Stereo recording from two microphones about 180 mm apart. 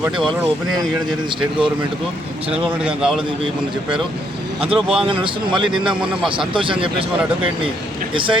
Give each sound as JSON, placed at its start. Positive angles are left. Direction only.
{"t": 2.8, "sound": "a man's voice", "side_deg": -5}
{"t": 4.7, "sound": "a man's voice", "side_deg": -5}
{"t": 5.0, "sound": "speech", "side_deg": -30}
{"t": 8.1, "sound": "speech", "side_deg": -30}